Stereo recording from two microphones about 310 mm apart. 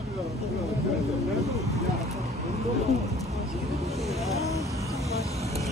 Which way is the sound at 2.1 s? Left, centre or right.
Centre.